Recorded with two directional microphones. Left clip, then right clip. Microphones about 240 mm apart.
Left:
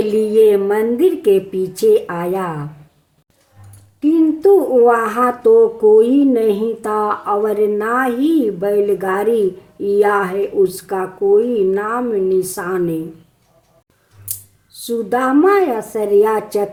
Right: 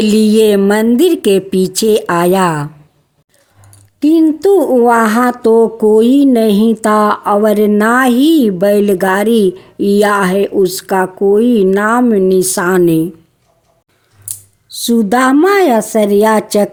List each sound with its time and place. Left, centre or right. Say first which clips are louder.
0.0 s speech: right 2 dB; right
4.0 s speech: right 3 dB; right
14.3 s scissors: right 3 dB; centre
14.7 s speech: right 6 dB; right